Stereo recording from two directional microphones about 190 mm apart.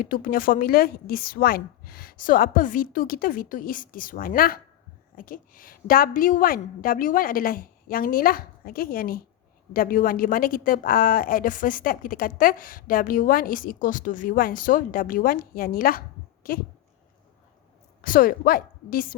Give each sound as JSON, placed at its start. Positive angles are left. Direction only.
{"t": 0.0, "sound": "a woman's voice", "side_deg": 50}
{"t": 18.0, "sound": "a woman's voice", "side_deg": 50}